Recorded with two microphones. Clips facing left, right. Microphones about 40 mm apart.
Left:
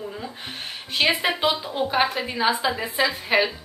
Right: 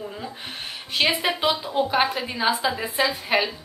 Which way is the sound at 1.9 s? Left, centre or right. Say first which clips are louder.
Even; centre.